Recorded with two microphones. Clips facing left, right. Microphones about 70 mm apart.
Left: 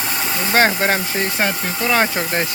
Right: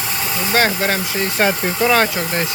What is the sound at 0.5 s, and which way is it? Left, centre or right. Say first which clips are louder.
Speech: left 2 dB; left.